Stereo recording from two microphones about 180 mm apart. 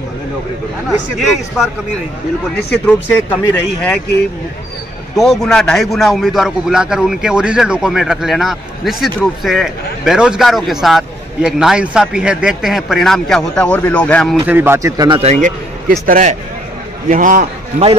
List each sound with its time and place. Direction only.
0.8 s a man's voice: centre (ahead or behind)
2.7 s speech: 5° left (ahead or behind)
5.1 s a man's voice: centre (ahead or behind)
14.4 s a man's voice: 10° right (ahead or behind)
15.1 s a man's voice: 35° right (ahead or behind)